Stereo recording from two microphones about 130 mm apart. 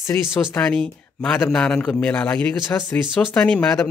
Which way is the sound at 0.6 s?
5° left (ahead or behind).